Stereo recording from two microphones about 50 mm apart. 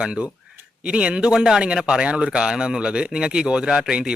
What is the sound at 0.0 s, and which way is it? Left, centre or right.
Speech, centre.